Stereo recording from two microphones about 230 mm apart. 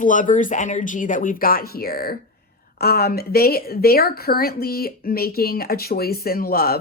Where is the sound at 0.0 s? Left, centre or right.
Left.